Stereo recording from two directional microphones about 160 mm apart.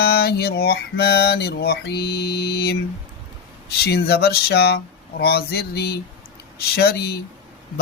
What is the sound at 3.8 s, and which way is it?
Music, 85° left.